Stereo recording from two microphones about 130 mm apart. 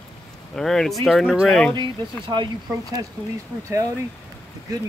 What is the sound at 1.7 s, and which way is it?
Speech, 35° right (ahead or behind).